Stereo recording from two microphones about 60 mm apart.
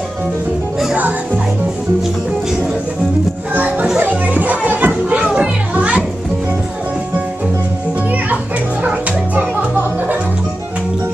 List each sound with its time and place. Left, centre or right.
0.9 s music: right
3.5 s music: right
8.8 s music: right